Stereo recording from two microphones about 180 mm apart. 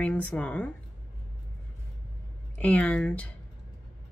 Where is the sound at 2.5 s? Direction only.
10° left (ahead or behind).